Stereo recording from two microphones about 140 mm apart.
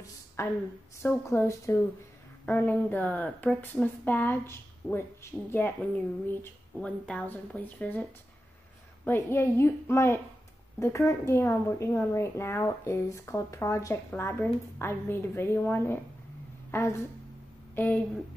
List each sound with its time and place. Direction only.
0.4 s a woman's voice: 20° left (ahead or behind)